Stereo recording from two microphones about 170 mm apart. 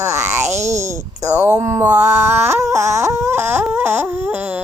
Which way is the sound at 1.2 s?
10° right (ahead or behind).